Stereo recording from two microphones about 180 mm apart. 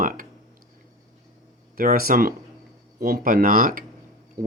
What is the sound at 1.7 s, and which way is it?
Speech, 55° right (ahead or behind).